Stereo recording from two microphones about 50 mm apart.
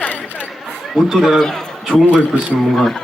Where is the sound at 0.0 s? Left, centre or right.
Left.